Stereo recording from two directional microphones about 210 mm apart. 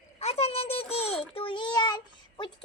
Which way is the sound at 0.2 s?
30° left (ahead or behind).